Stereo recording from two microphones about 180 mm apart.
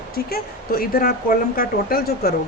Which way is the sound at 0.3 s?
55° left (ahead or behind).